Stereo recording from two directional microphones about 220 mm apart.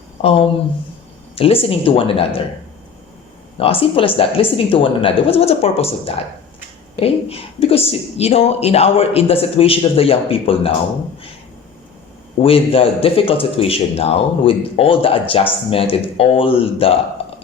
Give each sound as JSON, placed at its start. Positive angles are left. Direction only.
{"t": 0.2, "sound": "a man's voice", "side_deg": 25}
{"t": 3.6, "sound": "a man's voice", "side_deg": 25}
{"t": 12.4, "sound": "a man's voice", "side_deg": 25}
{"t": 17.2, "sound": "a sound", "side_deg": 25}